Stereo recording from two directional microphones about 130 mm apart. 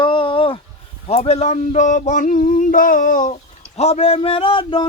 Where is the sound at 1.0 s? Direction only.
55° left (ahead or behind); by 3.3 s 85° left.